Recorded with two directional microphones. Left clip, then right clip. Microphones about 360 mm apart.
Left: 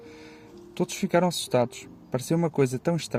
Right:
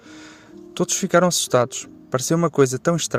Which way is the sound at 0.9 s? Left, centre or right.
Right.